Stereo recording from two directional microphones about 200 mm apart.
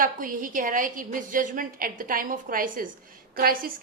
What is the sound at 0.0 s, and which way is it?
A woman's voice, 45° right (ahead or behind).